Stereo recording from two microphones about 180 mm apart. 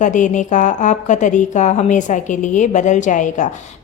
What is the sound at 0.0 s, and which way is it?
A woman's voice, 45° left (ahead or behind).